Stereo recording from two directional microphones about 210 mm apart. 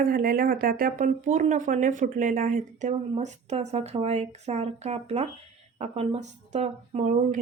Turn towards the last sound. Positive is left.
turn(degrees=-30)  # may be behind; listen again after turning